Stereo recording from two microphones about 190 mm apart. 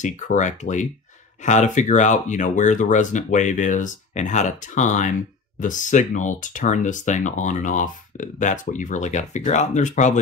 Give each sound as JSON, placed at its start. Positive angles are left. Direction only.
{"t": 0.0, "sound": "speech", "side_deg": 40}